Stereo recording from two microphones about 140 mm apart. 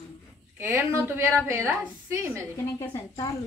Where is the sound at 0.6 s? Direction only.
15° right (ahead or behind).